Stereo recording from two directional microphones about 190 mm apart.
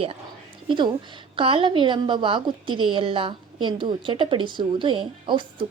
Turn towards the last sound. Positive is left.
turn(degrees=-25)  # may be behind; listen again after turning